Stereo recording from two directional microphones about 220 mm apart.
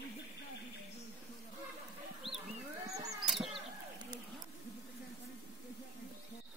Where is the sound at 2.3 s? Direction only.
25° right (ahead or behind).